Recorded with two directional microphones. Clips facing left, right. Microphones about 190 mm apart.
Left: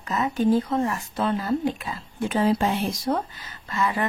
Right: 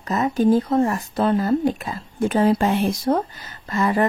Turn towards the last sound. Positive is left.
turn(degrees=-45)  # may be behind; listen again after turning